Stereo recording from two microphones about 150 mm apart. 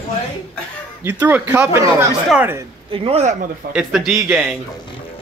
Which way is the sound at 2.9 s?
40° right (ahead or behind).